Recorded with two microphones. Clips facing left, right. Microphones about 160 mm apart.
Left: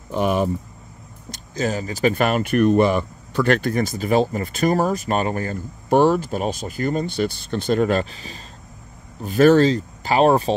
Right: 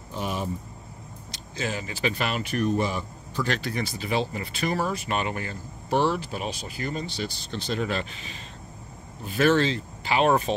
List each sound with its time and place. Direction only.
0.1 s speech: 65° left (ahead or behind)
1.3 s speech: 40° left (ahead or behind)